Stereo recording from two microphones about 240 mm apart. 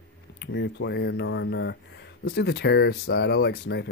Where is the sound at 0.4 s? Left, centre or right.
Left.